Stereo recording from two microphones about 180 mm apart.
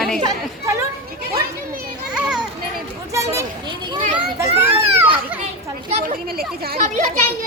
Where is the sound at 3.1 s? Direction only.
15° right (ahead or behind).